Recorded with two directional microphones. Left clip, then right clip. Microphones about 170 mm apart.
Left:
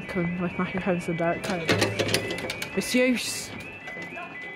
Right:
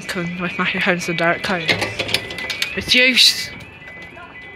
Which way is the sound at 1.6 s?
55° left (ahead or behind).